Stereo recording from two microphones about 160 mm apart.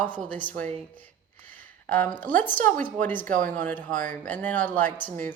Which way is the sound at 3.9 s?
55° right (ahead or behind).